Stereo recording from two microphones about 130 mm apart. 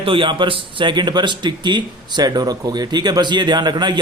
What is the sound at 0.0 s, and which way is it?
Speech, 40° right (ahead or behind).